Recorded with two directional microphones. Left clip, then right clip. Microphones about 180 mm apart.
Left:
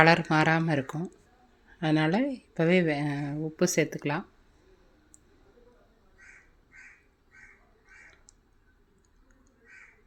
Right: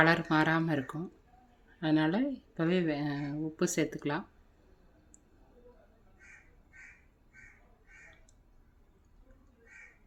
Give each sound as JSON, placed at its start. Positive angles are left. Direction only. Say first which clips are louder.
{"t": 0.0, "sound": "speech", "louder": "left 5 dB", "side_deg": 20}